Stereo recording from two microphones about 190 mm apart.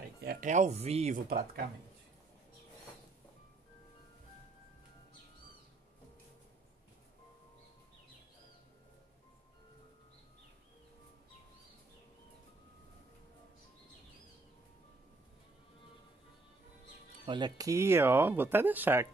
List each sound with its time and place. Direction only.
0.2 s a sound: 55° right (ahead or behind)
0.5 s speech: 35° right (ahead or behind)
17.3 s speech: 25° right (ahead or behind)